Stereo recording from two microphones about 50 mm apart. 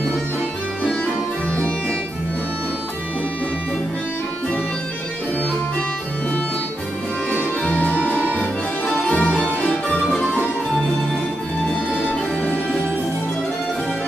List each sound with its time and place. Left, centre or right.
7.7 s music: left